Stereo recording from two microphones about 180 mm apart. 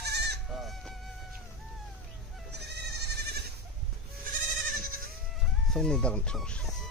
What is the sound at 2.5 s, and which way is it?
Goat, 65° right (ahead or behind).